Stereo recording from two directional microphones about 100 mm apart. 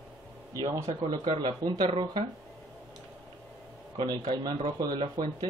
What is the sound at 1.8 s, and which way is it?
Speech, 60° right (ahead or behind).